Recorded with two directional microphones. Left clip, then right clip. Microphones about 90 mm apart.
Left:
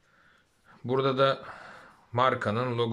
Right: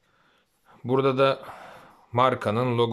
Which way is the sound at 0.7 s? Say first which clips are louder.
Right 4 dB; 30° right (ahead or behind).